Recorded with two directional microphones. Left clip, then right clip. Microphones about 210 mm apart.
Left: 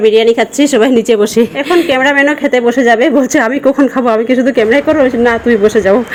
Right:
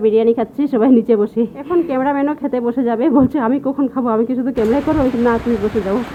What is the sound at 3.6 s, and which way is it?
A woman's voice, 35° left (ahead or behind).